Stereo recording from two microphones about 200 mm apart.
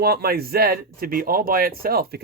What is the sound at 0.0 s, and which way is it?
Speech, 50° right (ahead or behind).